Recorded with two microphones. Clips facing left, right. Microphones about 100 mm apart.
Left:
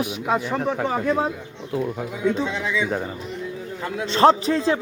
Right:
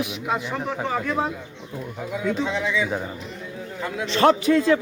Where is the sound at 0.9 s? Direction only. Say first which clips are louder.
Even; 30° left (ahead or behind).